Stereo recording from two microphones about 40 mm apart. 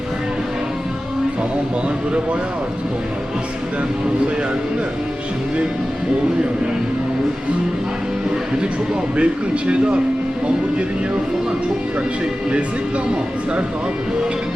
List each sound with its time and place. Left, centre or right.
9.1 s speech: right